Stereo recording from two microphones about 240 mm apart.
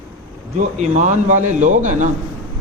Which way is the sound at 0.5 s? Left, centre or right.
Right.